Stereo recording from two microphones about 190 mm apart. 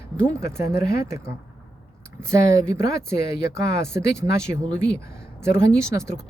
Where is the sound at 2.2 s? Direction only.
15° right (ahead or behind).